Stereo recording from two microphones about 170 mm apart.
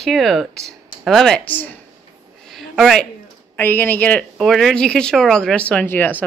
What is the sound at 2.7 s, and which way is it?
Speech, centre (ahead or behind).